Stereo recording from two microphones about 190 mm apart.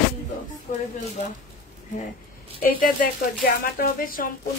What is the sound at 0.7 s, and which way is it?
Speech, 45° left (ahead or behind).